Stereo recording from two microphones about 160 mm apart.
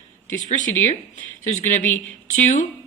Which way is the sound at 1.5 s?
50° left (ahead or behind).